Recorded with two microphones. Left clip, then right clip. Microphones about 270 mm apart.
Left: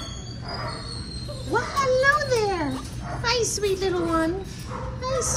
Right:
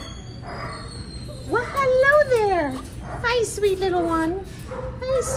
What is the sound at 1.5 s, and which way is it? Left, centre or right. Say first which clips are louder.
Children playing: right 2 dB; centre.